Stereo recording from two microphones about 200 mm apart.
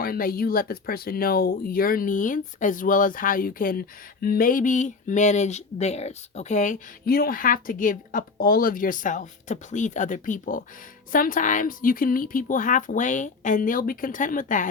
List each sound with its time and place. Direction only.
0.0 s speech: 45° left (ahead or behind)